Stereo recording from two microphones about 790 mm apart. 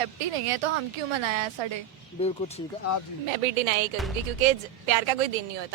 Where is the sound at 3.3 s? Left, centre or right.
Right.